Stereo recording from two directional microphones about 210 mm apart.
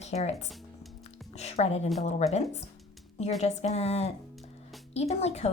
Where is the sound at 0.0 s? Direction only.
30° left (ahead or behind).